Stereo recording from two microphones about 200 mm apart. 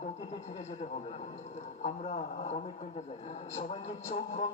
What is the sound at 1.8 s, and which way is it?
A man's voice, 35° left (ahead or behind).